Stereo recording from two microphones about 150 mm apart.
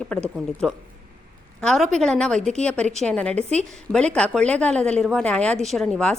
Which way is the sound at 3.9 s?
5° left (ahead or behind).